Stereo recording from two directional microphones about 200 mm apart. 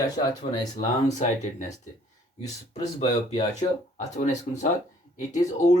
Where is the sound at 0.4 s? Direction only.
30° left (ahead or behind).